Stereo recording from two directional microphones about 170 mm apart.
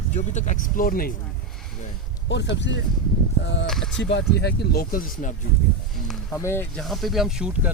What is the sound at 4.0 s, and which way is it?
Speech, 90° left.